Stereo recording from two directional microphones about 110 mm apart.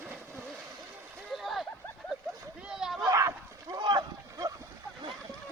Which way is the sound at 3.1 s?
30° right (ahead or behind).